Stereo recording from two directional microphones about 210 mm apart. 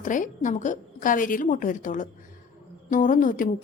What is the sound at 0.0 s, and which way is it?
A woman's voice, 40° left (ahead or behind).